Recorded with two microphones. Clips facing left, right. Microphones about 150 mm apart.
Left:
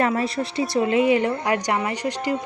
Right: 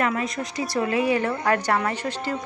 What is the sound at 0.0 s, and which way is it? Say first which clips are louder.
Speech: left 3 dB; 30° left (ahead or behind).